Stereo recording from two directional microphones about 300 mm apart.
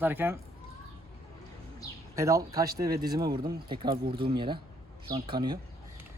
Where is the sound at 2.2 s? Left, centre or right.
Centre.